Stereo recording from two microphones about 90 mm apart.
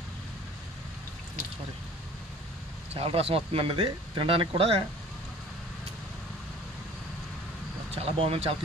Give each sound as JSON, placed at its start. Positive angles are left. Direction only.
{"t": 2.9, "sound": "speech", "side_deg": -90}
{"t": 7.9, "sound": "speech", "side_deg": -90}